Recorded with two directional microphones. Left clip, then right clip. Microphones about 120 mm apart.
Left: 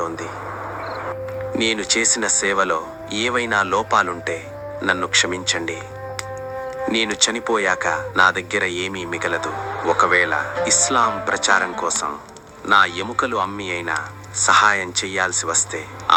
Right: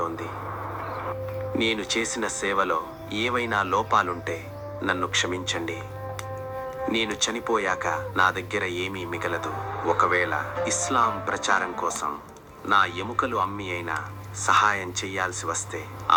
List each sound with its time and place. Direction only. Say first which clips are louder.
1.5 s speech: left 6 dB; 30° left (ahead or behind)
6.8 s speech: left 6 dB; 35° left (ahead or behind)